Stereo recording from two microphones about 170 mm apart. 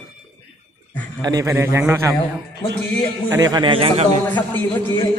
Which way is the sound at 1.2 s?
20° right (ahead or behind).